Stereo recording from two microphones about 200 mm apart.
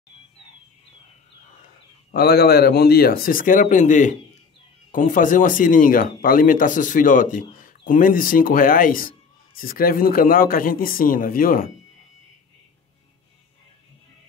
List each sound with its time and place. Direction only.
2.1 s speech: 50° left (ahead or behind)